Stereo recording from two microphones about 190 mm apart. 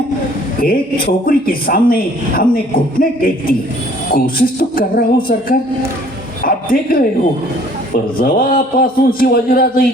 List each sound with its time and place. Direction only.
0.6 s speech: 50° left (ahead or behind)
8.2 s speech: 50° left (ahead or behind)